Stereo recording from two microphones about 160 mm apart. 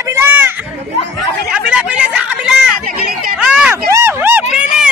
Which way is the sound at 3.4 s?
5° right (ahead or behind).